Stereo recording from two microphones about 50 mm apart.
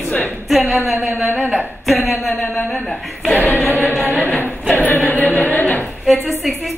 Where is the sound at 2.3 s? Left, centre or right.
Left.